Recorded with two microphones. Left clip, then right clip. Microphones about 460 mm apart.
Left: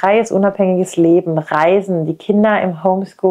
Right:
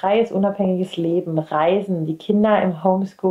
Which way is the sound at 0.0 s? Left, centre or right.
Left.